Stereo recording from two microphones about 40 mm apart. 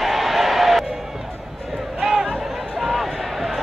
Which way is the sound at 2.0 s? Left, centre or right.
Centre.